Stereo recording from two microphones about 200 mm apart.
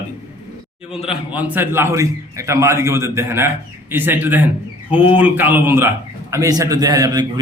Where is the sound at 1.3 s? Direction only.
10° right (ahead or behind).